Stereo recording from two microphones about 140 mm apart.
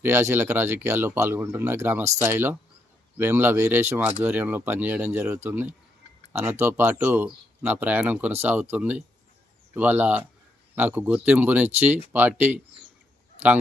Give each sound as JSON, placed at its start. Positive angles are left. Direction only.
{"t": 0.0, "sound": "speech", "side_deg": -20}